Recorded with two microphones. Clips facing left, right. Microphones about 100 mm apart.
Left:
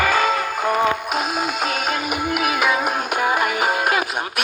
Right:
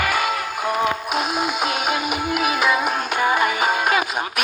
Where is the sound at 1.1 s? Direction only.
Centre (ahead or behind).